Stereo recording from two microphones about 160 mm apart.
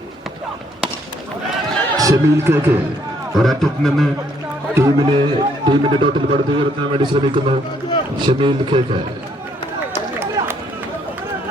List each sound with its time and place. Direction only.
2.0 s speech: 20° right (ahead or behind)
3.3 s a man's voice: centre (ahead or behind)
4.7 s a man's voice: 20° right (ahead or behind)
10.4 s run: 20° right (ahead or behind)